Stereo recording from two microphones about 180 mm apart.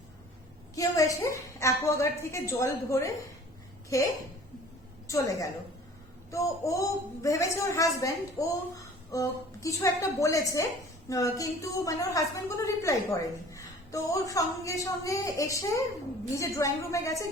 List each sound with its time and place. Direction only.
0.8 s a woman's voice: 20° left (ahead or behind)